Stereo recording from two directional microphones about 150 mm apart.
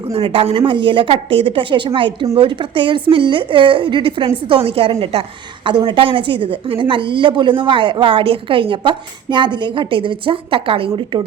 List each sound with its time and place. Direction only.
0.1 s a woman's voice: 40° right (ahead or behind)